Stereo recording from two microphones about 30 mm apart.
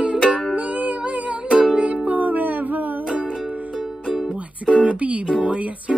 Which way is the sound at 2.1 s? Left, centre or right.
Right.